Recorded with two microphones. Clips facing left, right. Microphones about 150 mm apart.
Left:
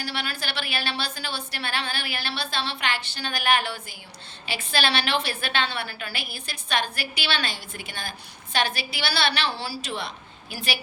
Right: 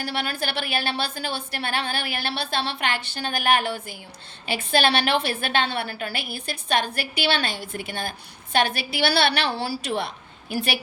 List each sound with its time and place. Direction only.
0.0 s a woman's voice: 50° right (ahead or behind)